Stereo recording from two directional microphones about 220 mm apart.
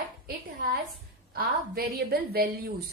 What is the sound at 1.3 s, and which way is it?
A woman's voice, 45° right (ahead or behind).